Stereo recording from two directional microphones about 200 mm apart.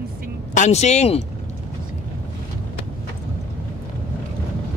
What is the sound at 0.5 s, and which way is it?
Speech, 35° left (ahead or behind).